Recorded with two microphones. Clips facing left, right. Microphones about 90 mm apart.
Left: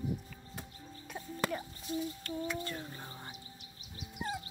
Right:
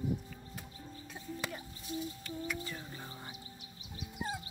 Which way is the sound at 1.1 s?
60° left (ahead or behind).